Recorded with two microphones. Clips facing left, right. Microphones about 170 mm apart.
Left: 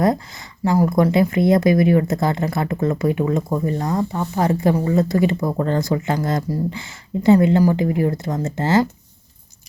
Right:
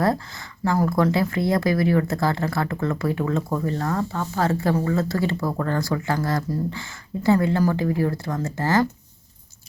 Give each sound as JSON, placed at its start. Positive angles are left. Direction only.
{"t": 0.0, "sound": "speech", "side_deg": 20}